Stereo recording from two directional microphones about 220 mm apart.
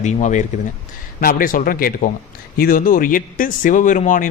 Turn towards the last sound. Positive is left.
turn(degrees=35)  # may be behind; listen again after turning